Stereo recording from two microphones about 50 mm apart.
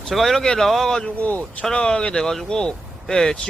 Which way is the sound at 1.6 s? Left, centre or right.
Centre.